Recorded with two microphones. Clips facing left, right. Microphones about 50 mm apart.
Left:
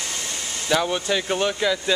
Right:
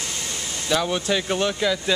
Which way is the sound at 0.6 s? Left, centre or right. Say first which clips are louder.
Left 1 dB; centre.